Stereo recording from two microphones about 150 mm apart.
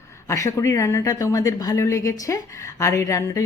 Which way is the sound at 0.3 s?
20° left (ahead or behind).